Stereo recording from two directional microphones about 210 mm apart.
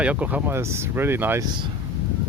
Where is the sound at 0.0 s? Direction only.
5° right (ahead or behind).